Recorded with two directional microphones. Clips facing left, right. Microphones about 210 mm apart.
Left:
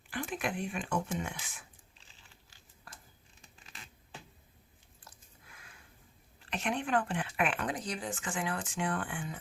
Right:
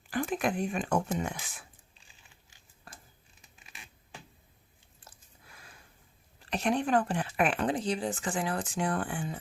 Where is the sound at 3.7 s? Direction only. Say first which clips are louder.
Even; 15° right (ahead or behind).